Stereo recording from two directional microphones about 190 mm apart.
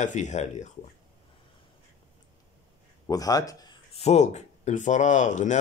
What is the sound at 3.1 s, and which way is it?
Speech, 20° left (ahead or behind).